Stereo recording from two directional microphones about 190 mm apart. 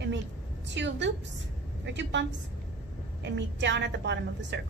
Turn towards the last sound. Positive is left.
turn(degrees=-65)  # may be behind; listen again after turning